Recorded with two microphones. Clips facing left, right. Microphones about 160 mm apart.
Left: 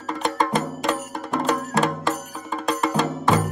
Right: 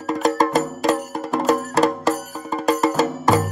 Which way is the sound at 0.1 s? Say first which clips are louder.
Right 5 dB; 40° right (ahead or behind).